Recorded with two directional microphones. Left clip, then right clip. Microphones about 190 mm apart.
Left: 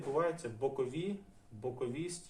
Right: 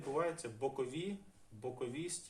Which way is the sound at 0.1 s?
15° right (ahead or behind).